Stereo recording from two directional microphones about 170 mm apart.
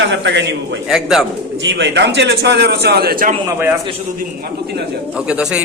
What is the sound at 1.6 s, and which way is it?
A man's voice, 90° right.